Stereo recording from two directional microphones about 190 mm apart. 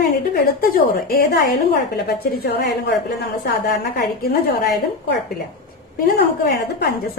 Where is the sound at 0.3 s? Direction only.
50° left (ahead or behind).